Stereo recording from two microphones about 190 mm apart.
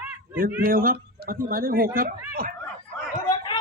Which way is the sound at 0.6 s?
50° right (ahead or behind).